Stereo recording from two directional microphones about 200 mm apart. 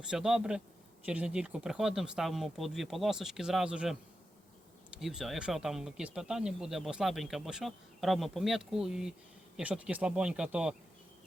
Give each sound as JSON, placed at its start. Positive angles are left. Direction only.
{"t": 0.1, "sound": "speech", "side_deg": -5}